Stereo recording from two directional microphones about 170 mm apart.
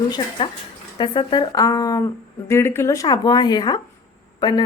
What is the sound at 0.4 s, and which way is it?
A woman's voice, 30° left (ahead or behind).